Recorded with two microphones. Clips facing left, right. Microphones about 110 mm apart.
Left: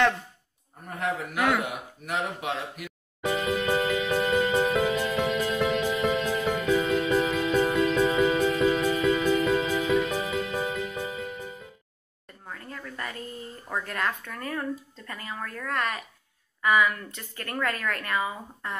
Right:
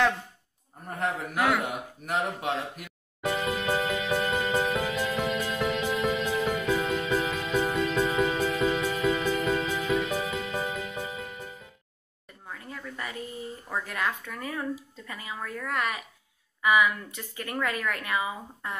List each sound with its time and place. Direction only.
0.8 s speech: 35° right (ahead or behind)
1.3 s speech: centre (ahead or behind)
2.0 s speech: 35° right (ahead or behind)
3.2 s music: centre (ahead or behind)
12.5 s speech: 10° right (ahead or behind)